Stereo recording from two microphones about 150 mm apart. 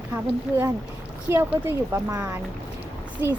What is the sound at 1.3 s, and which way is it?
Speech, 20° right (ahead or behind).